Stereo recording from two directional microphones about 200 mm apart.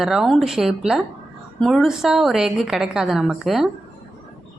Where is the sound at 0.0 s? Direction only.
Centre (ahead or behind).